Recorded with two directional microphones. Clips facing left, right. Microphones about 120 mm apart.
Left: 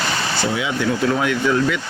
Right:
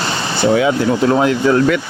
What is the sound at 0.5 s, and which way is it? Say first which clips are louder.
Speech: right 7 dB; 45° right (ahead or behind).